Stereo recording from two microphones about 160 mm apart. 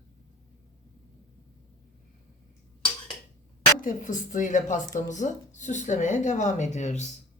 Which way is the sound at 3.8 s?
55° left (ahead or behind).